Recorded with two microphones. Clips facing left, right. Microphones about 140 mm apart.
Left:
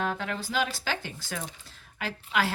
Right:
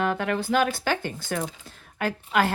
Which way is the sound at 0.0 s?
60° right (ahead or behind).